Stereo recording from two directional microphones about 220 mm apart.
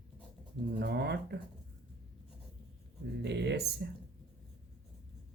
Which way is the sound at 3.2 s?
50° right (ahead or behind).